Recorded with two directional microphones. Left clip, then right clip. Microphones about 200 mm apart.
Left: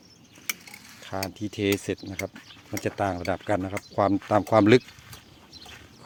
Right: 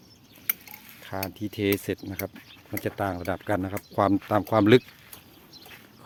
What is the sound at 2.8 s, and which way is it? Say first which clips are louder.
Speech: left 2 dB; 5° left (ahead or behind).